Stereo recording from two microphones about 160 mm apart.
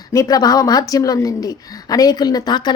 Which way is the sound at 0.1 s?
20° left (ahead or behind).